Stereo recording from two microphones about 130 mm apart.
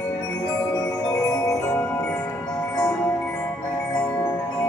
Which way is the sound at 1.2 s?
25° left (ahead or behind).